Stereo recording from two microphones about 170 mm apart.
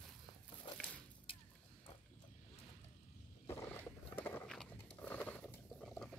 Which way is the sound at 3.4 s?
15° left (ahead or behind).